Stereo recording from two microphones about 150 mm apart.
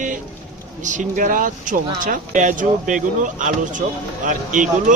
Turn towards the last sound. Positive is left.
turn(degrees=-60)  # may be behind; listen again after turning